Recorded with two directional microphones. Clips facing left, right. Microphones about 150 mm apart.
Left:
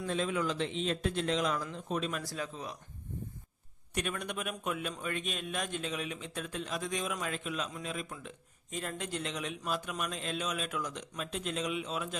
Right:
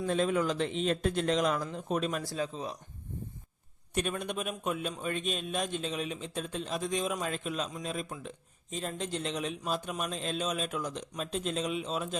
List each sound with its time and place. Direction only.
0.1 s a man's voice: 45° right (ahead or behind)
2.2 s a man's voice: 30° right (ahead or behind)
3.9 s a man's voice: 30° right (ahead or behind)
8.7 s a man's voice: 25° right (ahead or behind)